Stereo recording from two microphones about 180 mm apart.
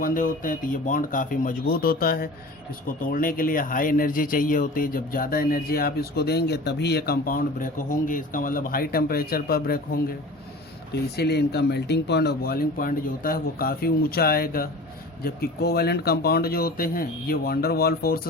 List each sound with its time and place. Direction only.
0.0 s speech: 50° left (ahead or behind)
11.2 s speech: 65° left (ahead or behind)